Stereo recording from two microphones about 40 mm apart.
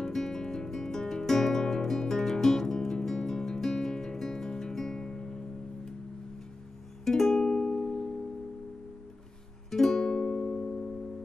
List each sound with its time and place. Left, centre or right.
0.0 s music: centre
7.1 s music: centre
9.7 s music: centre